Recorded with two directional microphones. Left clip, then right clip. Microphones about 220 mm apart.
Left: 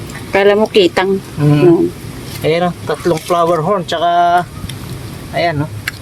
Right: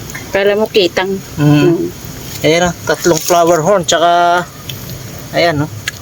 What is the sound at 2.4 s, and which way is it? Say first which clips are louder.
Speech: right 3 dB; 30° right (ahead or behind).